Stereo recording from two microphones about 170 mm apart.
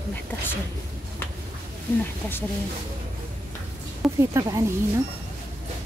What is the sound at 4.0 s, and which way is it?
Speech, 15° right (ahead or behind).